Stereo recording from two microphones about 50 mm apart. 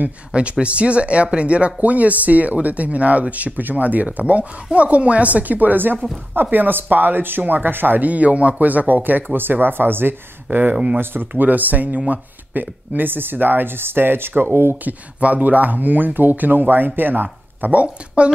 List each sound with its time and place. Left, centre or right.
0.3 s speech: right
10.6 s speech: right
11.0 s speech: right
14.9 s speech: right